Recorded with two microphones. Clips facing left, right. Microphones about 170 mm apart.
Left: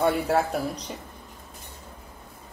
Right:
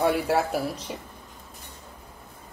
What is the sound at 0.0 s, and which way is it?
Speech, centre (ahead or behind).